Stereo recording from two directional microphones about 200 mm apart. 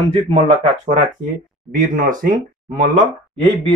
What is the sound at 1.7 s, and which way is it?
Speech, 45° right (ahead or behind).